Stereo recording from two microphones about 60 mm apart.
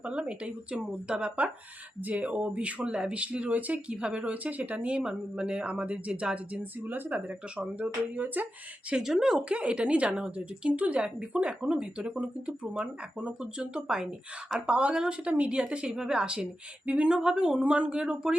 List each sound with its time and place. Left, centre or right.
0.0 s speech: centre
2.0 s speech: right
8.9 s a woman's voice: centre